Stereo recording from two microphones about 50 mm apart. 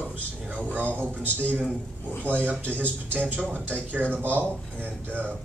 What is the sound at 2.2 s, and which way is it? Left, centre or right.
A man's voice, right.